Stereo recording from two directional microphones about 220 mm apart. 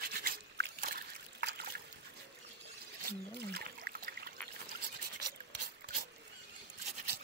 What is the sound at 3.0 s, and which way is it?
Trickle, 45° right (ahead or behind).